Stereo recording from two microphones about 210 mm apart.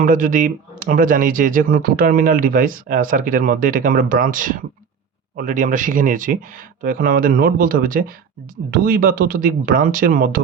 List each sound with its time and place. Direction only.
0.0 s speech: 40° right (ahead or behind)